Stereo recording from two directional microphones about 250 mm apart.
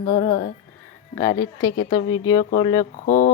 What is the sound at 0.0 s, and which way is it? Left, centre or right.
Speech, left.